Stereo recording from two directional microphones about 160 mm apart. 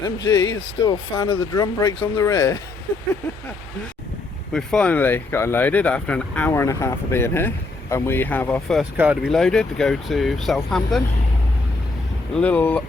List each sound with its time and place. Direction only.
0.3 s speech: 25° left (ahead or behind)
4.5 s speech: 5° left (ahead or behind)
9.0 s speech: 10° right (ahead or behind)
9.3 s speech: 5° left (ahead or behind)
12.4 s speech: 10° left (ahead or behind)